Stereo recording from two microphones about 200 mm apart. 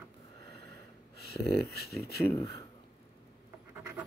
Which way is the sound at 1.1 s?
55° left (ahead or behind).